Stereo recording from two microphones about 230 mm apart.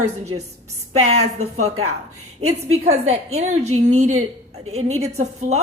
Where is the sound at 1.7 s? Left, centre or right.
Right.